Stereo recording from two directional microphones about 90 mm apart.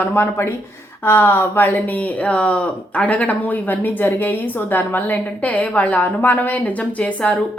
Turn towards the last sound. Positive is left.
turn(degrees=15)  # may be behind; listen again after turning